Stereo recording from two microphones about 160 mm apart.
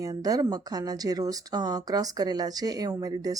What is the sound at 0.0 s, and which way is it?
A woman's voice, 25° right (ahead or behind).